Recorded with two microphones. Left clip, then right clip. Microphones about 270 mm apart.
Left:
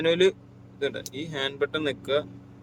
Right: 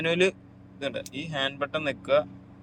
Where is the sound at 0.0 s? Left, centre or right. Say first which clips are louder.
Left 3 dB; centre.